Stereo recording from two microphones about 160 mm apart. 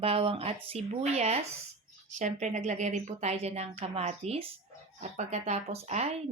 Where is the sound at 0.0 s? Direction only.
35° right (ahead or behind).